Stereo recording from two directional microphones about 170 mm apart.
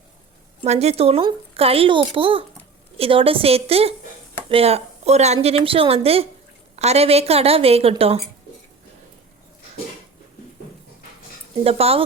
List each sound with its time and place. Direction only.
0.6 s speech: 40° right (ahead or behind)
11.6 s speech: 35° right (ahead or behind)